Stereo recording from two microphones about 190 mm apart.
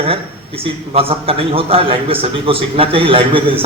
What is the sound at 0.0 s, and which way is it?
A man's voice, 30° right (ahead or behind).